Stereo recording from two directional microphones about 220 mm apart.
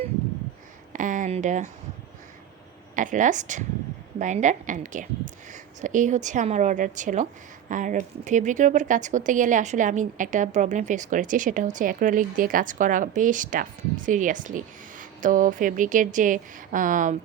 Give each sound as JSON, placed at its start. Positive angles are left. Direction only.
{"t": 0.9, "sound": "speech", "side_deg": -35}
{"t": 2.9, "sound": "speech", "side_deg": -35}